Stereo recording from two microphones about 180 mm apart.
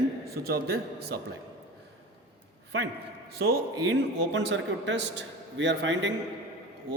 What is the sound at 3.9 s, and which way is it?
A man's voice, 85° right.